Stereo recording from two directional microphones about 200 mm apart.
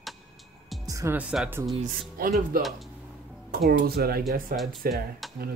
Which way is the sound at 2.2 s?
45° right (ahead or behind).